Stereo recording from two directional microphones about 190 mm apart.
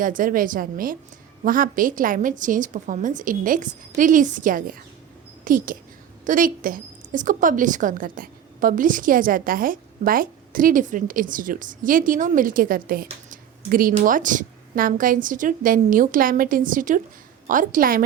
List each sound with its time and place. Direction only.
0.0 s a woman's voice: 45° right (ahead or behind)
13.1 s a sound: 45° right (ahead or behind)
13.9 s a woman's voice: 45° right (ahead or behind)